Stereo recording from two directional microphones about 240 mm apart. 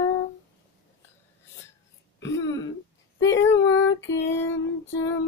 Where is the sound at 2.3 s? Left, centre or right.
Left.